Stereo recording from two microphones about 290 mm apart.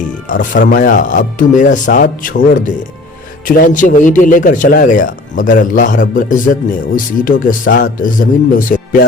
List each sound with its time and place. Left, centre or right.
0.3 s a man's voice: left
3.4 s a man's voice: left